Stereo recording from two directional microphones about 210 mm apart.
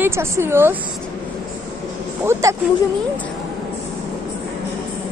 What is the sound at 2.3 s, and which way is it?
Speech, 15° right (ahead or behind).